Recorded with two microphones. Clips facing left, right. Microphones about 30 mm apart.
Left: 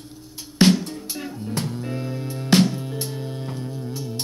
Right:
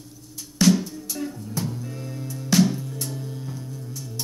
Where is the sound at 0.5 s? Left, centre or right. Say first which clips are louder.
Left 2 dB; left.